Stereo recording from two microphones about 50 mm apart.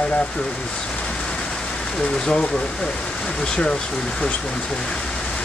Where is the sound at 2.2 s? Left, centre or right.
Centre.